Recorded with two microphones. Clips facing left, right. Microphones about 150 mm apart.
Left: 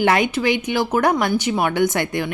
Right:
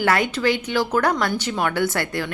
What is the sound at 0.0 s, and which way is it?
A woman's voice, 20° left (ahead or behind).